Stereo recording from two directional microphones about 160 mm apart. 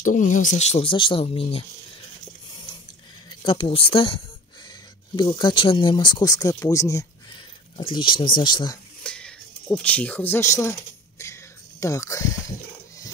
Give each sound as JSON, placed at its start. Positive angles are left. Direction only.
{"t": 0.0, "sound": "speech", "side_deg": 50}
{"t": 3.3, "sound": "speech", "side_deg": 35}
{"t": 7.7, "sound": "speech", "side_deg": 30}
{"t": 9.0, "sound": "a sound", "side_deg": 5}
{"t": 11.8, "sound": "speech", "side_deg": 20}